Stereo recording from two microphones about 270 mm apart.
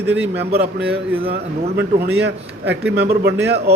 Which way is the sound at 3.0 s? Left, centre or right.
Right.